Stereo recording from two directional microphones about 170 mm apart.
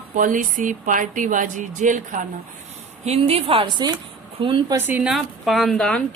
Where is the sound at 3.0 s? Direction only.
35° right (ahead or behind).